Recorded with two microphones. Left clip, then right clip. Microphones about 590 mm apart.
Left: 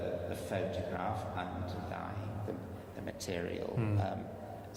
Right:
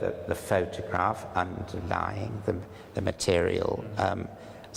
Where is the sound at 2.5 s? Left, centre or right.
Right.